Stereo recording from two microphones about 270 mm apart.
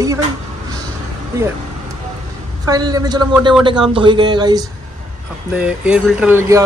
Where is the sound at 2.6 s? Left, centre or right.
Centre.